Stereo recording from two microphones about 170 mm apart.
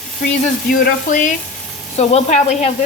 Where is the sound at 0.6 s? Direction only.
55° left (ahead or behind).